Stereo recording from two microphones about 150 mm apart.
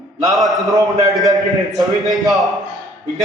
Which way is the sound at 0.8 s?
20° right (ahead or behind).